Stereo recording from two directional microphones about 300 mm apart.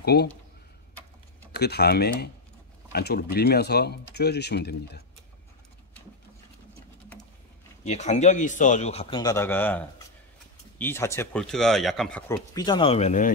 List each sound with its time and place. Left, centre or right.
0.0 s speech: left
1.5 s speech: left
7.8 s a man's voice: left